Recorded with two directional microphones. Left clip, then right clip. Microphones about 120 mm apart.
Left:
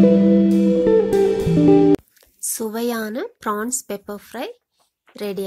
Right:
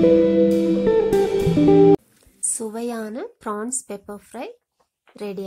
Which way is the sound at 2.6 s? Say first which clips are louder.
Left 6 dB; 20° left (ahead or behind).